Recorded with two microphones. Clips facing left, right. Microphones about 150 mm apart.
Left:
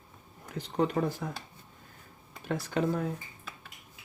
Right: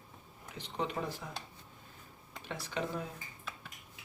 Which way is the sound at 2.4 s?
50° left (ahead or behind).